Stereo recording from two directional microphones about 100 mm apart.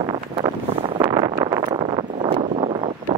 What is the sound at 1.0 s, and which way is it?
Vehicle, 40° right (ahead or behind).